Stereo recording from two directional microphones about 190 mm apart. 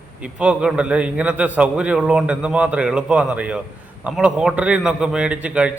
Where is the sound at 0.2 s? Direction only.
5° right (ahead or behind).